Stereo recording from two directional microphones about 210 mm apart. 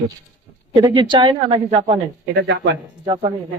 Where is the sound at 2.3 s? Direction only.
55° right (ahead or behind).